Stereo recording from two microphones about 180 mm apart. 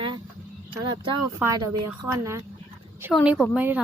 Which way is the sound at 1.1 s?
15° right (ahead or behind).